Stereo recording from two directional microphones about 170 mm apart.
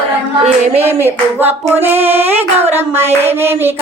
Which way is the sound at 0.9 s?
15° right (ahead or behind).